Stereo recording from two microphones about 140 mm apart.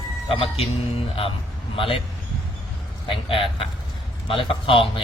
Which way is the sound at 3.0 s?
40° left (ahead or behind).